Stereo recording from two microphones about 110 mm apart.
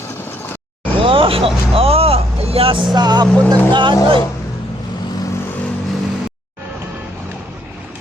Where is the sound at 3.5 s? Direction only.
45° right (ahead or behind).